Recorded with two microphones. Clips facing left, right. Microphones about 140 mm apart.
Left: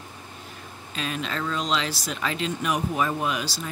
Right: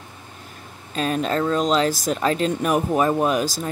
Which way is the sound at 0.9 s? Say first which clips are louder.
Right 8 dB; 45° right (ahead or behind).